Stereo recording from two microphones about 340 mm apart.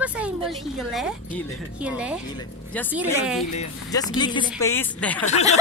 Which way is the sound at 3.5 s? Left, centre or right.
Centre.